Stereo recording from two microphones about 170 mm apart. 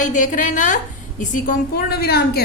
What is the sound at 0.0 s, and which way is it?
A woman's voice, 50° left (ahead or behind).